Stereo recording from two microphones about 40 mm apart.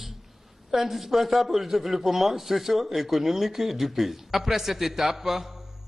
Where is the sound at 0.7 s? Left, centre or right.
Centre.